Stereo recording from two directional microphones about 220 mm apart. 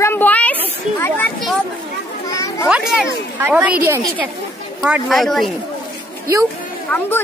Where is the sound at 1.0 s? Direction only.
10° left (ahead or behind).